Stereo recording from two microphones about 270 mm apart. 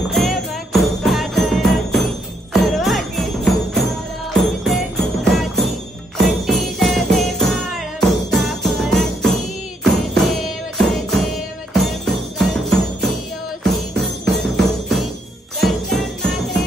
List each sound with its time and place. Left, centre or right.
0.1 s jingle bell: centre
4.3 s music: centre
15.6 s jingle bell: centre